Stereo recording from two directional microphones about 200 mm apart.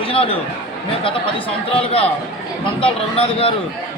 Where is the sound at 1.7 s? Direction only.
30° left (ahead or behind).